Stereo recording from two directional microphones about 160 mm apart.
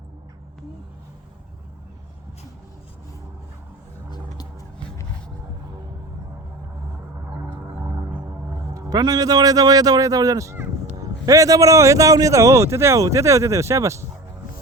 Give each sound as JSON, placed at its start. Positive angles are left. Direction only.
{"t": 7.8, "sound": "music", "side_deg": -15}
{"t": 8.3, "sound": "speech", "side_deg": -20}